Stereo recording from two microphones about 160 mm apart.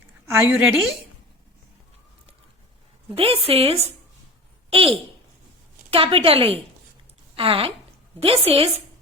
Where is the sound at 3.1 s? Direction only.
35° right (ahead or behind).